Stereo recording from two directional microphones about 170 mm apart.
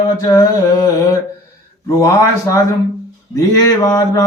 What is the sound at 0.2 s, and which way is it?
Mantra, 20° left (ahead or behind).